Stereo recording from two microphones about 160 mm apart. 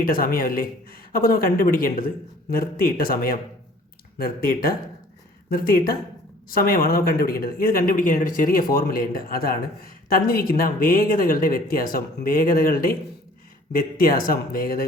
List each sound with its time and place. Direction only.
0.0 s speech: 65° left (ahead or behind)